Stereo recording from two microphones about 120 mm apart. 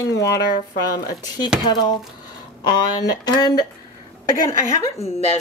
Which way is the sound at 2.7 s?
35° left (ahead or behind).